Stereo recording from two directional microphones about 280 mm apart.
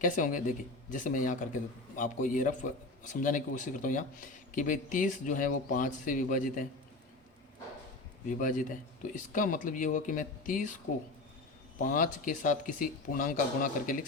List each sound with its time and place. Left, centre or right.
0.0 s speech: left
8.3 s speech: left
11.8 s speech: left